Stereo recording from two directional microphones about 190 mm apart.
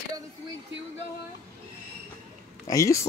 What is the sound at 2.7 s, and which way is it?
Speech, 15° left (ahead or behind).